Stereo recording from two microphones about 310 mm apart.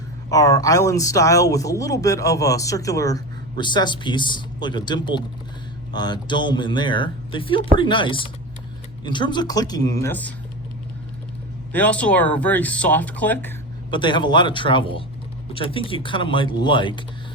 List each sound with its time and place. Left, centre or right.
0.3 s speech: centre
11.7 s speech: centre